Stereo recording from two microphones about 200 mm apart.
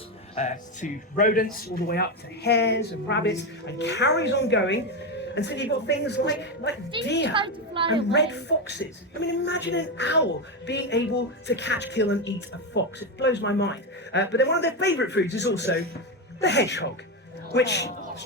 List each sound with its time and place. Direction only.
0.3 s speech: 35° left (ahead or behind); by 7.3 s 60° left (ahead or behind)
7.3 s a woman's voice: 25° right (ahead or behind)
8.1 s speech: 60° left (ahead or behind)